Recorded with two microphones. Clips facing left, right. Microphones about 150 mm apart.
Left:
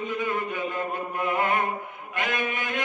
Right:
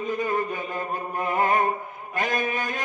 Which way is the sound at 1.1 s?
35° right (ahead or behind).